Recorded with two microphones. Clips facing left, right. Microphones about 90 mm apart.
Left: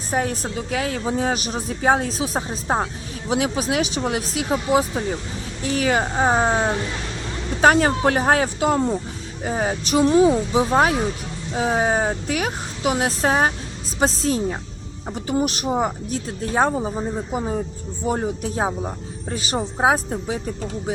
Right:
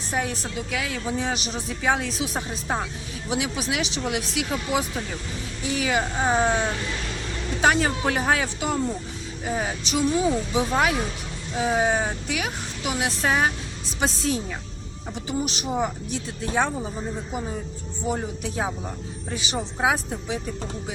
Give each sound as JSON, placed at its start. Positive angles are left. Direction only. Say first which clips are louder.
{"t": 0.1, "sound": "speech", "louder": "left 5 dB", "side_deg": 40}
{"t": 5.6, "sound": "speech", "louder": "left 4 dB", "side_deg": 45}